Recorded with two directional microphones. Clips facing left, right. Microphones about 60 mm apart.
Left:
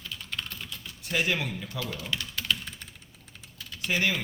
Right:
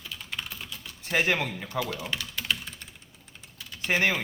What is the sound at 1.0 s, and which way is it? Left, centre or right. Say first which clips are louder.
Speech: right 3 dB; right.